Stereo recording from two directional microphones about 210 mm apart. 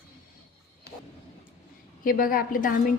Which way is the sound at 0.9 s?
55° left (ahead or behind).